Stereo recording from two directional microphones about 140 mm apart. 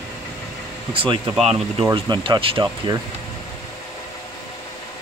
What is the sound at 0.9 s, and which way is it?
Speech, 40° right (ahead or behind).